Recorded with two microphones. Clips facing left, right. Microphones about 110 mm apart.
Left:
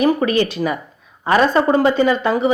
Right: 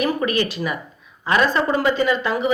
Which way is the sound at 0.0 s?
30° left (ahead or behind).